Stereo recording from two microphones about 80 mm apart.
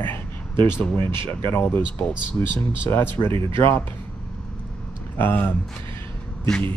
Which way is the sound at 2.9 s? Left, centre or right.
Left.